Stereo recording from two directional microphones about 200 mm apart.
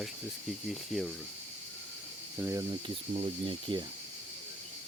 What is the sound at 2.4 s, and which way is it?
Speech, 15° right (ahead or behind).